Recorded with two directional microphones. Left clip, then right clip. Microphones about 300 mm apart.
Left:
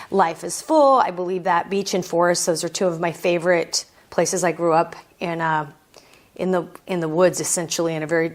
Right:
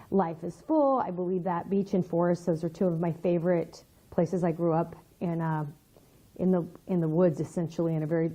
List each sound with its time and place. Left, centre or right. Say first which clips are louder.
0.2 s a woman's voice: left 11 dB; centre
0.7 s a woman's voice: left 10 dB; left
0.9 s a woman's voice: left 10 dB; centre
2.0 s a woman's voice: left 12 dB; centre